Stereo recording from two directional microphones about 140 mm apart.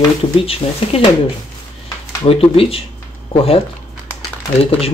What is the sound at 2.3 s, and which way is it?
Speech, 40° left (ahead or behind).